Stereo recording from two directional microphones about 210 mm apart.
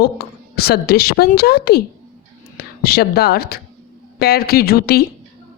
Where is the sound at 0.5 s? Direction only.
50° left (ahead or behind).